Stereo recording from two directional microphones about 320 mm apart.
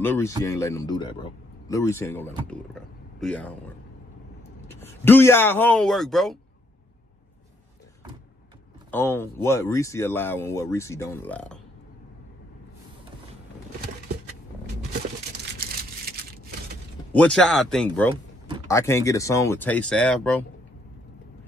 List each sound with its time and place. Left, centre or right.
0.4 s speech: centre
4.7 s speech: centre
8.9 s speech: centre
15.6 s a sound: right
17.1 s speech: centre